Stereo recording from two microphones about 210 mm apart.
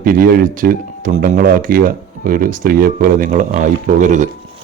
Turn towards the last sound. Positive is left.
turn(degrees=-35)  # may be behind; listen again after turning